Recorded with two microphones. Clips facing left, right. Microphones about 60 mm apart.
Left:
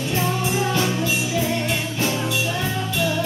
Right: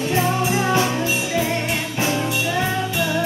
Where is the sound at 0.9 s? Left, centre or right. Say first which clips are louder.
Right 1 dB; right.